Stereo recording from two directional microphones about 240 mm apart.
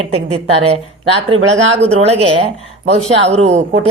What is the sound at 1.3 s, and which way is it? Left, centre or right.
Speech, right.